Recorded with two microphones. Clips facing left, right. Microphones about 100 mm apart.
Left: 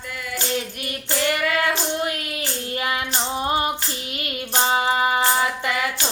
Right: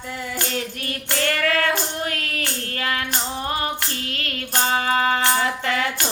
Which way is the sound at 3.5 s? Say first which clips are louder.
Left 4 dB; 20° left (ahead or behind).